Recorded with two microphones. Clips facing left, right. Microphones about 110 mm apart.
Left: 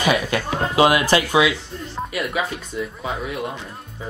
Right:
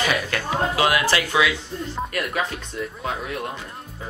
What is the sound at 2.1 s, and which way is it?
Speech, 5° left (ahead or behind).